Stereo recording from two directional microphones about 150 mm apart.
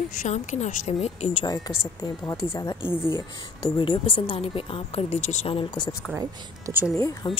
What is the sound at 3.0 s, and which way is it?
Speech, 35° left (ahead or behind).